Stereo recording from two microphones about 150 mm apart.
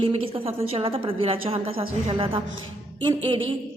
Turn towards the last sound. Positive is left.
turn(degrees=-35)  # may be behind; listen again after turning